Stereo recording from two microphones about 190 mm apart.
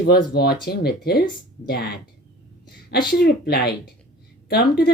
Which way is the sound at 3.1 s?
60° left (ahead or behind).